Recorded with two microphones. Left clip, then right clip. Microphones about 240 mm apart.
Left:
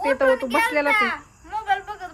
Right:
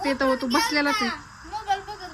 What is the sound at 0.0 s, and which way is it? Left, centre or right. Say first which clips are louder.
A child's voice: left 4 dB; centre.